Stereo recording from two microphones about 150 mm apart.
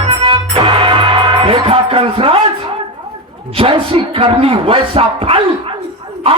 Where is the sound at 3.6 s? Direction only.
40° right (ahead or behind).